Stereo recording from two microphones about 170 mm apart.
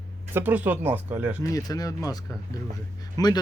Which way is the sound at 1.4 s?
20° left (ahead or behind).